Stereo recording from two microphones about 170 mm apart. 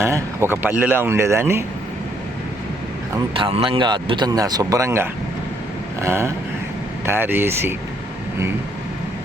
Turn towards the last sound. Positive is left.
turn(degrees=-15)  # may be behind; listen again after turning